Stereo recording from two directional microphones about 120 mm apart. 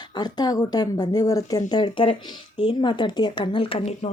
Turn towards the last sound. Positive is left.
turn(degrees=55)  # may be behind; listen again after turning